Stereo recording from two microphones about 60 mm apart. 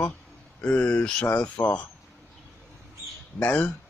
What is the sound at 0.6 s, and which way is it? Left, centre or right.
Speech, left.